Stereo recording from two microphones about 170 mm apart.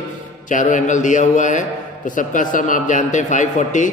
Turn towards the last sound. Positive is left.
turn(degrees=45)  # may be behind; listen again after turning